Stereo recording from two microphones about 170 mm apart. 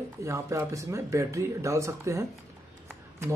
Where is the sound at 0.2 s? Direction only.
15° right (ahead or behind).